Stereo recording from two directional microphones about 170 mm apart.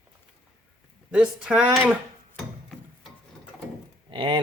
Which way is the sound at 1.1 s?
5° right (ahead or behind).